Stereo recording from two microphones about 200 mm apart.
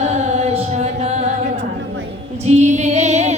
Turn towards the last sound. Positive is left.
turn(degrees=-35)  # may be behind; listen again after turning